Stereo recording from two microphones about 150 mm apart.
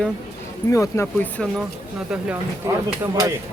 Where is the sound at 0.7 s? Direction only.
20° left (ahead or behind).